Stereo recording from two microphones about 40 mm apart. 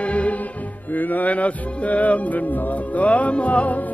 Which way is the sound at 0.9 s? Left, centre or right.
Left.